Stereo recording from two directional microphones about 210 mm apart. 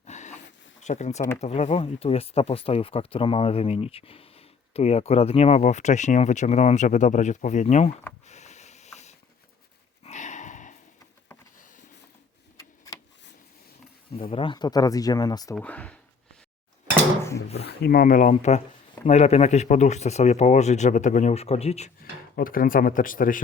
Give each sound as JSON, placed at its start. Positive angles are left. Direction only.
{"t": 0.0, "sound": "a sound", "side_deg": 35}
{"t": 1.4, "sound": "speech", "side_deg": 30}
{"t": 8.3, "sound": "a sound", "side_deg": 35}
{"t": 10.0, "sound": "dog", "side_deg": 35}
{"t": 12.5, "sound": "vehicle", "side_deg": 15}
{"t": 14.2, "sound": "speech", "side_deg": 25}
{"t": 15.5, "sound": "speech", "side_deg": 5}
{"t": 17.7, "sound": "speech", "side_deg": 45}
{"t": 22.4, "sound": "speech", "side_deg": 40}